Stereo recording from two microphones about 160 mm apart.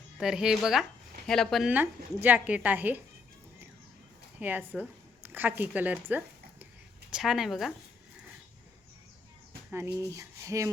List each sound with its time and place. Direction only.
0.2 s speech: 5° right (ahead or behind)
1.7 s a woman's voice: 10° right (ahead or behind)
4.4 s a woman's voice: 10° right (ahead or behind)
9.6 s speech: 15° right (ahead or behind)